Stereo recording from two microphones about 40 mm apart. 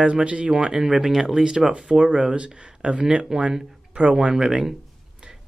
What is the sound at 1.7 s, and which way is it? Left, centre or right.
Speech, right.